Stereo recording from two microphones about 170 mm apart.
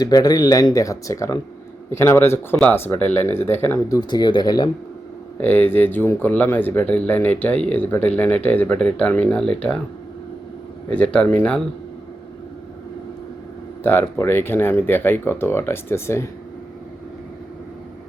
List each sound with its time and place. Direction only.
0.0 s speech: 20° left (ahead or behind)
5.4 s speech: 10° left (ahead or behind)
10.8 s speech: 5° left (ahead or behind)
13.8 s speech: 15° left (ahead or behind)